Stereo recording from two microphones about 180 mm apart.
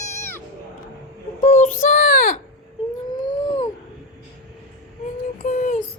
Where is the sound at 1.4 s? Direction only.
40° left (ahead or behind).